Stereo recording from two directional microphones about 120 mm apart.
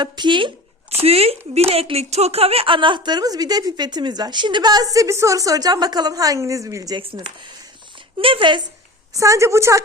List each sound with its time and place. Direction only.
0.0 s speech: 40° right (ahead or behind)
6.9 s speech: 50° right (ahead or behind)
9.1 s a woman's voice: 25° right (ahead or behind)